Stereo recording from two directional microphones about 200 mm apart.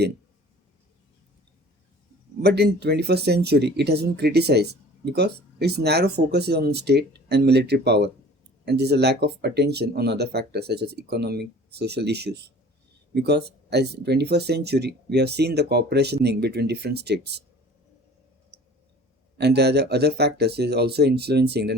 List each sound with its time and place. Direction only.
2.4 s speech: 55° right (ahead or behind)
19.4 s speech: 55° right (ahead or behind)